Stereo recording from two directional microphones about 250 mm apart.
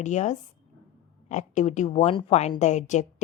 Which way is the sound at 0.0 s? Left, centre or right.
Left.